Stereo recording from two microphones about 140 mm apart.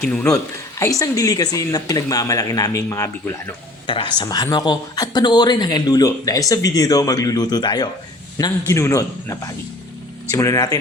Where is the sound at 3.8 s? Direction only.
35° left (ahead or behind).